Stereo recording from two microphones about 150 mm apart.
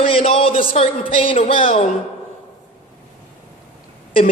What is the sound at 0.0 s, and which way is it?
A man's voice, 40° left (ahead or behind).